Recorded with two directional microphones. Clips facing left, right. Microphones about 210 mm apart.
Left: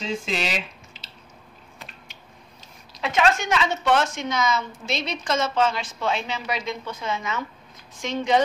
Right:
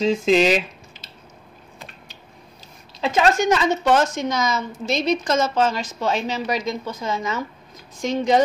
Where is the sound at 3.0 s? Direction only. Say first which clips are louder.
Right 3 dB; 35° right (ahead or behind).